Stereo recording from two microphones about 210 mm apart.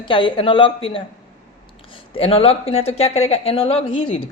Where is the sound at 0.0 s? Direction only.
25° left (ahead or behind).